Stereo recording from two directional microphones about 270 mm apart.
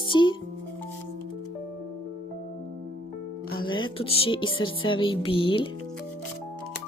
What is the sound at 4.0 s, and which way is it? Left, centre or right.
Speech, left.